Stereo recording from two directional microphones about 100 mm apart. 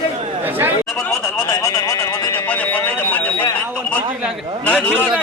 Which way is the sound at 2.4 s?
15° left (ahead or behind).